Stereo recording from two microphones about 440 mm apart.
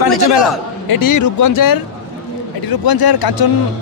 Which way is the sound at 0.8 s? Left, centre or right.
Left.